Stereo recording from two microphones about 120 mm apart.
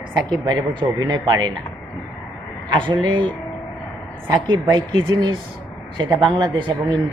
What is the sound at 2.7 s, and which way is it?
Speech, 40° right (ahead or behind).